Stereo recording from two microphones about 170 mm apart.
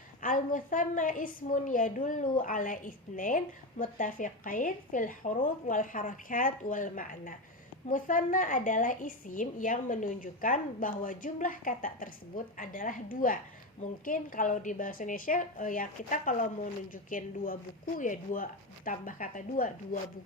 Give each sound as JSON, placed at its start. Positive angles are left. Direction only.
{"t": 0.2, "sound": "a woman's voice", "side_deg": 50}